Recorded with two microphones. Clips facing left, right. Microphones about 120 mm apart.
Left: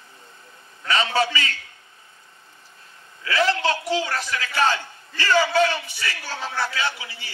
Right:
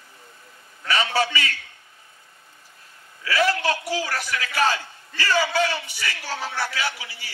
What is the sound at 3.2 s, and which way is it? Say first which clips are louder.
A man's voice: left 1 dB; 25° left (ahead or behind).